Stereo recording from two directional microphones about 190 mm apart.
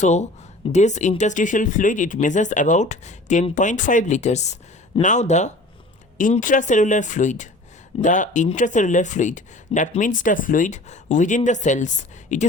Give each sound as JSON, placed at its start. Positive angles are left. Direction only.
{"t": 0.0, "sound": "speech", "side_deg": 40}